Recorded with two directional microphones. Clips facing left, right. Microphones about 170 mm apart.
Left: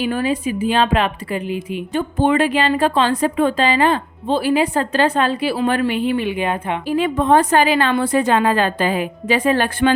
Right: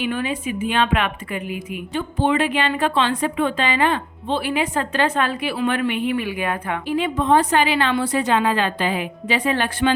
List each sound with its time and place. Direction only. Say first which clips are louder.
0.0 s a woman's voice: left 4 dB; 35° left (ahead or behind)
1.9 s a woman's voice: left 3 dB; 45° left (ahead or behind); by 6.7 s 25° left (ahead or behind)
6.8 s a woman's voice: left 3 dB; 45° left (ahead or behind)